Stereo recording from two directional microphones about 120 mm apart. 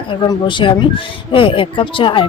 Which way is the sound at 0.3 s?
40° left (ahead or behind).